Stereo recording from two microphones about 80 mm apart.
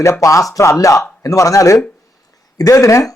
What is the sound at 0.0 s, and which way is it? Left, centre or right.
A man's voice, left.